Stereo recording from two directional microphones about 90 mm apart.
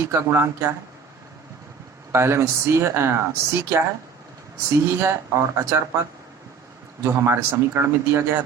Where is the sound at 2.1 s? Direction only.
30° right (ahead or behind).